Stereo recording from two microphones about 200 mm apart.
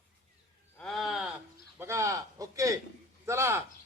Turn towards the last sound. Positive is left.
turn(degrees=-15)  # may be behind; listen again after turning